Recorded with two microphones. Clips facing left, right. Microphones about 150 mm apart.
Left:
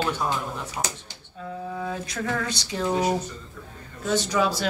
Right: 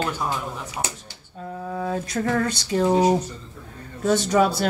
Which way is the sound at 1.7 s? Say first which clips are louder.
Right 7 dB; 45° right (ahead or behind).